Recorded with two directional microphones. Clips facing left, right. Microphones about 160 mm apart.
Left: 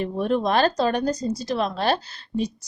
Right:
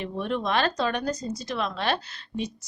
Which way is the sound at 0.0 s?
40° left (ahead or behind).